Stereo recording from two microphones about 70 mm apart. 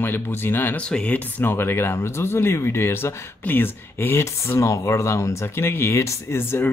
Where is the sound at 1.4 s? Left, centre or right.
Left.